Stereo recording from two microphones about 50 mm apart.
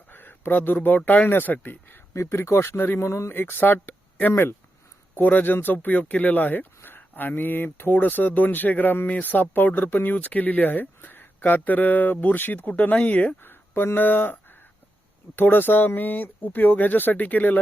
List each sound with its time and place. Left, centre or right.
0.1 s speech: left
3.1 s speech: left
3.3 s speech: left
5.1 s speech: left
13.4 s speech: left
15.4 s speech: left